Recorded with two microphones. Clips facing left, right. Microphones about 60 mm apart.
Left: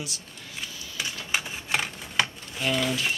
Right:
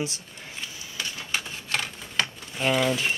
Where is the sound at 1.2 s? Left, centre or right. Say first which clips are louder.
Left 3 dB; centre.